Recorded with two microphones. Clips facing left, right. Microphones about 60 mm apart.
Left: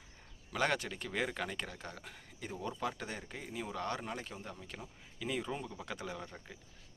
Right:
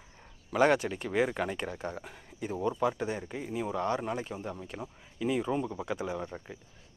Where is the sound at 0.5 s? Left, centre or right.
Centre.